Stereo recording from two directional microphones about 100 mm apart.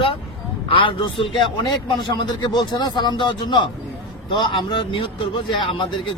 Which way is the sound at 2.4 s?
45° left (ahead or behind).